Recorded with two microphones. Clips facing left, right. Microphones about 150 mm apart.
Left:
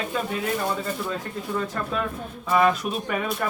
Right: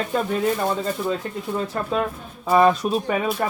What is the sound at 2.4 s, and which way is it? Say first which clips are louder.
Speech: right 4 dB; 30° right (ahead or behind).